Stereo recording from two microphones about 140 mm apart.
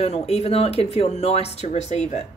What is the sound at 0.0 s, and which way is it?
Speech, 45° left (ahead or behind).